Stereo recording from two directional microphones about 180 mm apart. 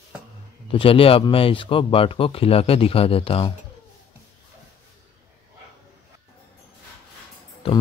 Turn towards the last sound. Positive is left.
turn(degrees=30)  # may be behind; listen again after turning